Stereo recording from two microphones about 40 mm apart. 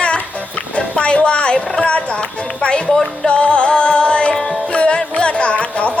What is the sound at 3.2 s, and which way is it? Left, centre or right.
Music, left.